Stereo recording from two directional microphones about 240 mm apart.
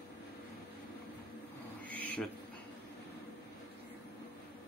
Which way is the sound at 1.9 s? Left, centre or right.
Centre.